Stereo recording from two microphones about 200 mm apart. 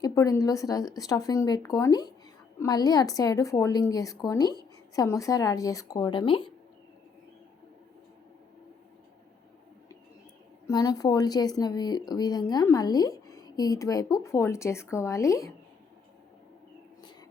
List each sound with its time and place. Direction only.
0.0 s speech: 15° left (ahead or behind)
10.7 s speech: 15° left (ahead or behind)